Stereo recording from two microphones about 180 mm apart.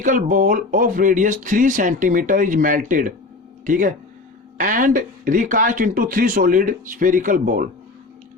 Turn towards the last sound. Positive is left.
turn(degrees=-50)  # may be behind; listen again after turning